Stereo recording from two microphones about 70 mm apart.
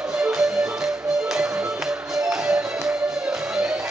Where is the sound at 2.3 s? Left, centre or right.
Centre.